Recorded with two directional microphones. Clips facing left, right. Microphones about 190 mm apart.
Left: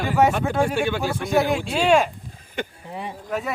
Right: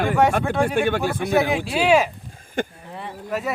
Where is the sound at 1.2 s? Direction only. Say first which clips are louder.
Left 1 dB; centre (ahead or behind).